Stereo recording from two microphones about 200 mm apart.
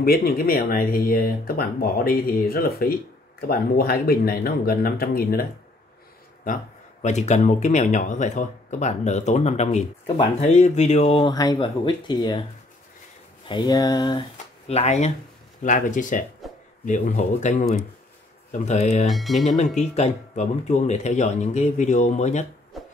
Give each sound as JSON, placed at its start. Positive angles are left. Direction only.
{"t": 0.0, "sound": "speech", "side_deg": 50}
{"t": 13.5, "sound": "speech", "side_deg": 20}
{"t": 14.7, "sound": "speech", "side_deg": 35}
{"t": 19.0, "sound": "speech", "side_deg": 0}
{"t": 19.4, "sound": "speech", "side_deg": 35}
{"t": 22.7, "sound": "music", "side_deg": 0}